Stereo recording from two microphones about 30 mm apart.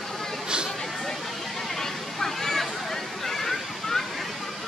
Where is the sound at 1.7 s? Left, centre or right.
Centre.